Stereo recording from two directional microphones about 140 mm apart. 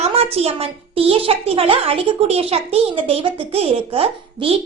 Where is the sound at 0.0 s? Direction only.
50° right (ahead or behind).